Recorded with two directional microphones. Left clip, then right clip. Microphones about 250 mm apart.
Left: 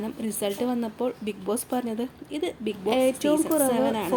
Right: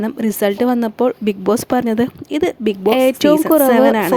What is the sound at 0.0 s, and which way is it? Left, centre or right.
Speech, right.